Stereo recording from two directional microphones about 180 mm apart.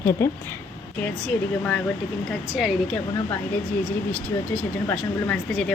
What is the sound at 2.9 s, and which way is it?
Speech, 20° left (ahead or behind).